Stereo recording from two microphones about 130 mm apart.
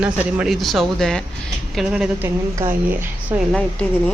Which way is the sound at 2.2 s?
15° right (ahead or behind).